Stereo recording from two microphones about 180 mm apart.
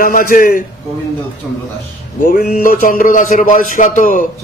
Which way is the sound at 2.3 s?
55° left (ahead or behind).